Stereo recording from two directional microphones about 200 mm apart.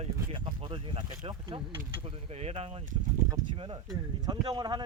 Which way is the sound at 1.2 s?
25° right (ahead or behind).